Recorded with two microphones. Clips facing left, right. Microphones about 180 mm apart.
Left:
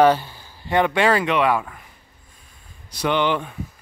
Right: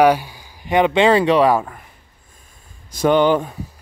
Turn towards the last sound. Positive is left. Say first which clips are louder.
# right 6 dB
turn(degrees=-40)  # may be behind; listen again after turning